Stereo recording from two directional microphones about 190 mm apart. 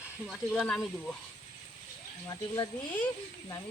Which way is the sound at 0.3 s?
Centre (ahead or behind).